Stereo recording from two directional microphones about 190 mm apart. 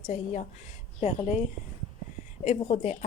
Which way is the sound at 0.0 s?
40° left (ahead or behind).